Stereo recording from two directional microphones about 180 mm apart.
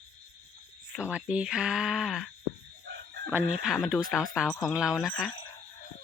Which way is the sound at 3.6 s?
Centre (ahead or behind).